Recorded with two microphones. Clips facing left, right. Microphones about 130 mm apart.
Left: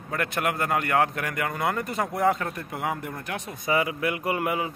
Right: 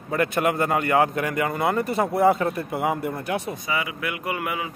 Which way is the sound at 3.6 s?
40° left (ahead or behind).